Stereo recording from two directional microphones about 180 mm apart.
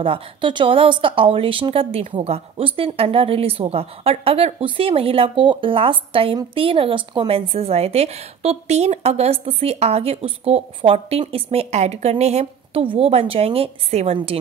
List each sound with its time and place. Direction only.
0.0 s a woman's voice: 30° right (ahead or behind)